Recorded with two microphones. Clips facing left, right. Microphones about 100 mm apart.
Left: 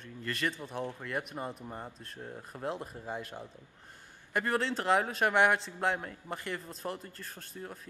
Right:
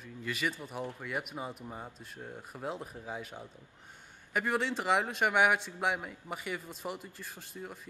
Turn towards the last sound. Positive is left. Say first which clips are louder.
# even
turn(degrees=-5)  # may be behind; listen again after turning